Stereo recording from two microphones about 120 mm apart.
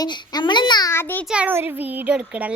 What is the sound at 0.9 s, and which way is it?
Speech, 20° left (ahead or behind).